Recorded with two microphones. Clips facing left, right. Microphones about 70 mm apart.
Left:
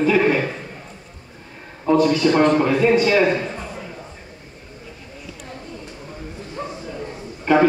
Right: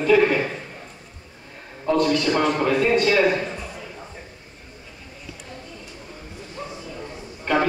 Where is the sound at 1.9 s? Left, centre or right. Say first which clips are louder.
Left 4 dB; centre.